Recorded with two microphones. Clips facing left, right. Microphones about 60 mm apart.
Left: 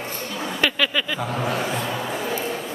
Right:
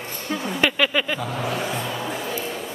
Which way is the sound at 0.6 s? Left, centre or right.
Centre.